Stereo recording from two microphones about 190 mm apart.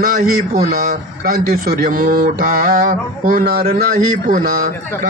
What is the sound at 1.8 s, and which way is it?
A man's voice, 45° right (ahead or behind).